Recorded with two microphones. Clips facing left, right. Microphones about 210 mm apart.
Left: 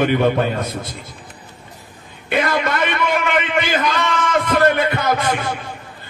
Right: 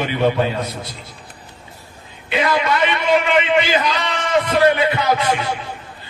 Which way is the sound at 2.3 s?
50° left (ahead or behind).